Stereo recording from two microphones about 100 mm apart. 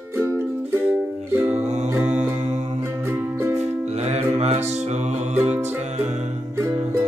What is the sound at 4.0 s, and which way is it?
Mantra, 90° right.